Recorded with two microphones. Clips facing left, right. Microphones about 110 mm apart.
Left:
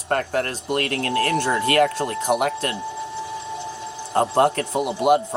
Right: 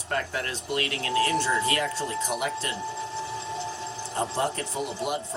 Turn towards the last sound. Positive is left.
turn(degrees=65)  # may be behind; listen again after turning